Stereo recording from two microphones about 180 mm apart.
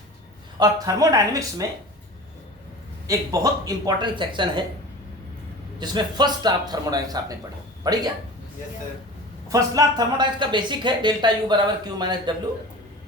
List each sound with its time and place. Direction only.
0.6 s speech: 20° right (ahead or behind)
3.1 s speech: 20° right (ahead or behind)
5.8 s speech: 25° right (ahead or behind)
9.5 s speech: 20° right (ahead or behind)